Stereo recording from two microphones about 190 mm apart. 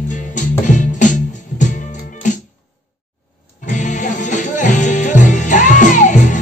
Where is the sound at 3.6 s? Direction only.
40° left (ahead or behind).